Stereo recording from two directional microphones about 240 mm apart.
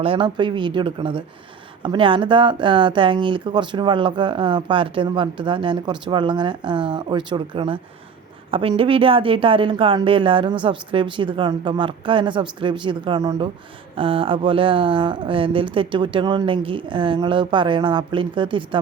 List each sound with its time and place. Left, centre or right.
0.0 s speech: right